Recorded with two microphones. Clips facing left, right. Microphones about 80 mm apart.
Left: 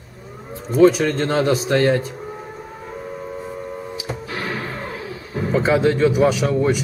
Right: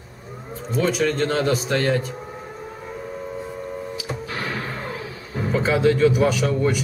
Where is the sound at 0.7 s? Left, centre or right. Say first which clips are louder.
Left 7 dB; centre.